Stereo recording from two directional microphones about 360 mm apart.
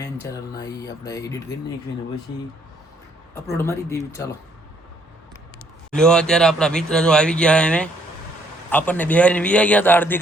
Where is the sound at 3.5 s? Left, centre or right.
Centre.